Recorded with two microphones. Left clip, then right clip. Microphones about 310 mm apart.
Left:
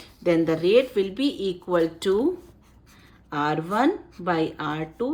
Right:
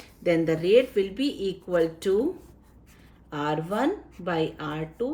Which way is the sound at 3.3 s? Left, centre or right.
Centre.